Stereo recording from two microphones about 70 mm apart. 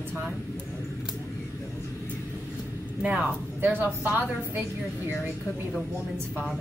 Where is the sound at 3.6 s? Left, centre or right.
Right.